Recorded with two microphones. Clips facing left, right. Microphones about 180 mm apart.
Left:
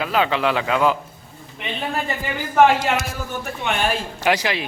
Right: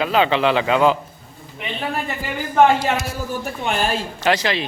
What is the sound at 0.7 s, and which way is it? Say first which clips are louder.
Speech: right 3 dB; 25° right (ahead or behind).